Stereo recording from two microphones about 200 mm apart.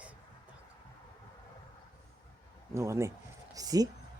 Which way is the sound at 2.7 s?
15° right (ahead or behind).